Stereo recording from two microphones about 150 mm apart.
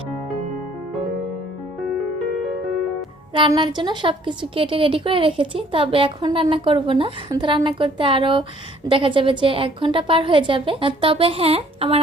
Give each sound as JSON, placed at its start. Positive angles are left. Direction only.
{"t": 3.3, "sound": "a woman's voice", "side_deg": -30}